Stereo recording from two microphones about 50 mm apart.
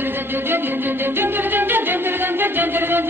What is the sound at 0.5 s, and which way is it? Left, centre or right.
Music, right.